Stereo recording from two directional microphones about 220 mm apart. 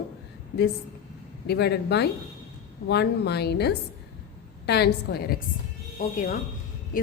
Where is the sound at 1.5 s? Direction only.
50° left (ahead or behind).